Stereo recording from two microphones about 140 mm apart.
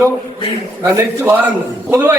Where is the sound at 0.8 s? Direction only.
15° right (ahead or behind).